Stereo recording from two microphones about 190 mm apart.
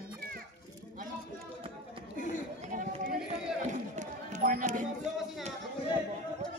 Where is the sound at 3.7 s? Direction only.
40° right (ahead or behind).